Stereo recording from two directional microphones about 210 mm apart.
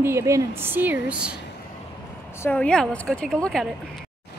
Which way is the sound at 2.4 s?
5° left (ahead or behind).